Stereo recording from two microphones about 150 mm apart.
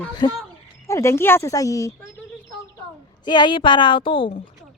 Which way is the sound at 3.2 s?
30° left (ahead or behind).